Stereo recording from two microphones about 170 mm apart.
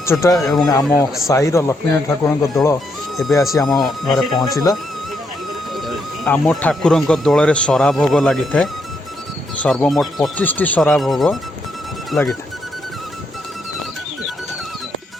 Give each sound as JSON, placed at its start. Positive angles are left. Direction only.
{"t": 0.0, "sound": "speech", "side_deg": 15}
{"t": 0.3, "sound": "speech", "side_deg": 0}
{"t": 0.7, "sound": "speech", "side_deg": 20}
{"t": 3.2, "sound": "speech", "side_deg": 20}
{"t": 3.7, "sound": "speech", "side_deg": 0}
{"t": 4.5, "sound": "speech", "side_deg": 20}
{"t": 5.7, "sound": "a sound", "side_deg": 0}
{"t": 6.3, "sound": "speech", "side_deg": 5}